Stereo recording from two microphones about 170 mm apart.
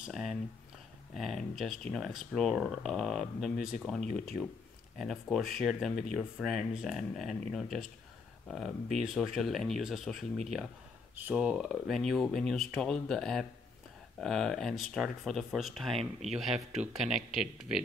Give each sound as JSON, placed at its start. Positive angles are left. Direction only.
{"t": 0.0, "sound": "speech", "side_deg": 0}
{"t": 3.5, "sound": "speech", "side_deg": 55}
{"t": 3.8, "sound": "speech", "side_deg": 5}
{"t": 16.7, "sound": "speech", "side_deg": -40}
{"t": 17.3, "sound": "speech", "side_deg": 0}